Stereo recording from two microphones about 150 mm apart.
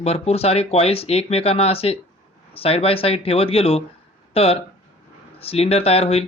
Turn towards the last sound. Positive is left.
turn(degrees=40)  # may be behind; listen again after turning